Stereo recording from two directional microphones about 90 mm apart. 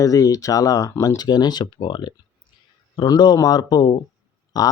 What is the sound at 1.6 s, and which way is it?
Speech, 65° left (ahead or behind).